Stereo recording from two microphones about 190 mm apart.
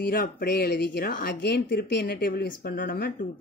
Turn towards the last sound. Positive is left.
turn(degrees=50)  # may be behind; listen again after turning